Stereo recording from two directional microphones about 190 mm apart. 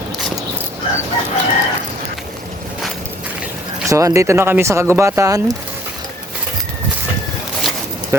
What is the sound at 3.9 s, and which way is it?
Speech, 15° right (ahead or behind).